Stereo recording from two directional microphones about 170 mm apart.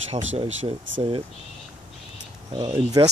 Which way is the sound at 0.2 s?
40° right (ahead or behind).